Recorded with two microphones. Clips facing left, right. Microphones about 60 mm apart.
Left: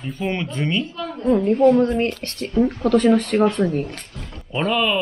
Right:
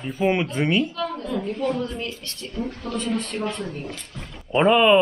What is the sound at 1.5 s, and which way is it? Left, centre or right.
Speech, left.